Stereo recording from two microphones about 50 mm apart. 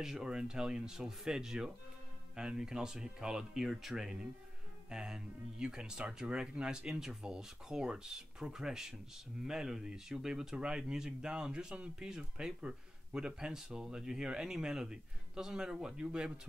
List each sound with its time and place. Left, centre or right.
0.0 s speech: centre